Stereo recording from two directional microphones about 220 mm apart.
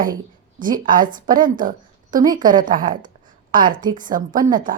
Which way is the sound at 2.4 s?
40° right (ahead or behind).